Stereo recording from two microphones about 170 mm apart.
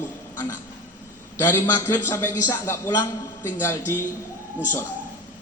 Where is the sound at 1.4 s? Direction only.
15° left (ahead or behind).